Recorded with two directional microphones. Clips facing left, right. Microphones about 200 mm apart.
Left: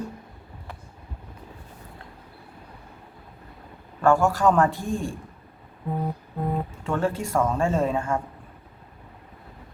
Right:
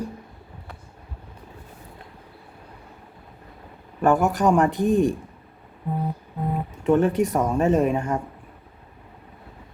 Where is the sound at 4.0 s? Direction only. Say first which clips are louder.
Right 1 dB; 20° right (ahead or behind).